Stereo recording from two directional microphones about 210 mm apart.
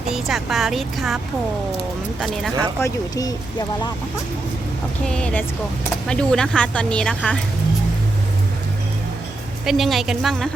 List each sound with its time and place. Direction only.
0.1 s a woman's voice: centre (ahead or behind)
2.2 s a woman's voice: centre (ahead or behind)
2.8 s speech: 15° left (ahead or behind)
5.0 s a woman's voice: 5° left (ahead or behind)
9.6 s a woman's voice: centre (ahead or behind)